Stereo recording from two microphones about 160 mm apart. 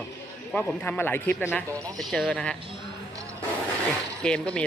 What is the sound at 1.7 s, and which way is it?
Speech, 20° right (ahead or behind).